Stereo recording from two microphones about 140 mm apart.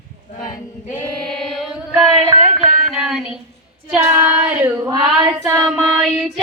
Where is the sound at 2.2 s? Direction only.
15° right (ahead or behind).